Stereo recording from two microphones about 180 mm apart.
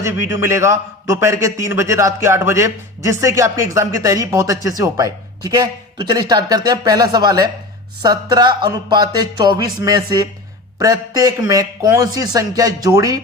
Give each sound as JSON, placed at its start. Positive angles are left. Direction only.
{"t": 0.0, "sound": "a man's voice", "side_deg": -15}